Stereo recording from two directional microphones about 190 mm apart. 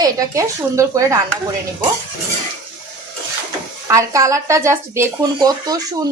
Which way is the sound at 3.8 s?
15° right (ahead or behind).